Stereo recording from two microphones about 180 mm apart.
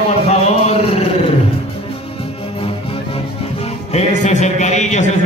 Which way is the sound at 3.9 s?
40° left (ahead or behind).